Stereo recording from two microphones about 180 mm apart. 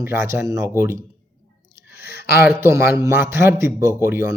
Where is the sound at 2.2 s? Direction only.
60° left (ahead or behind).